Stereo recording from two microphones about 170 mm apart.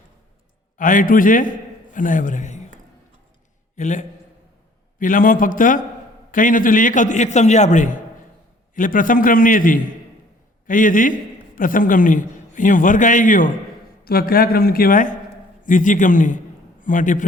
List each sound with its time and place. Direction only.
0.8 s a man's voice: 50° left (ahead or behind)
3.8 s a man's voice: 45° left (ahead or behind)
14.0 s a man's voice: 60° left (ahead or behind)